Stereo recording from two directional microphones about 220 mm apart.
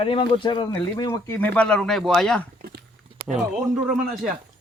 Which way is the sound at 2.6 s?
40° right (ahead or behind).